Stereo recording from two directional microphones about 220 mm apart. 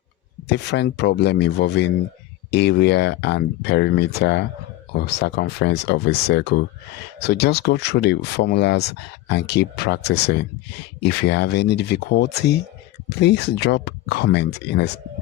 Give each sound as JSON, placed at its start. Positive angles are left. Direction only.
{"t": 0.4, "sound": "speech", "side_deg": 50}